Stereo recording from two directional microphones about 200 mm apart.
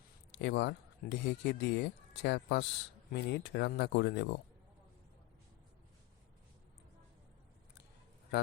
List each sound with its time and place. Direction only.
0.3 s speech: 60° left (ahead or behind)